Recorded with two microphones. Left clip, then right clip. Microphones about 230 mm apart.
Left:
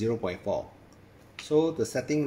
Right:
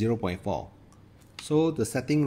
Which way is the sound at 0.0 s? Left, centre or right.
Right.